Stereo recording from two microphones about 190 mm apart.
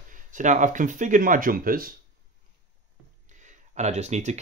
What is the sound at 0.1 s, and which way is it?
Speech, 40° right (ahead or behind).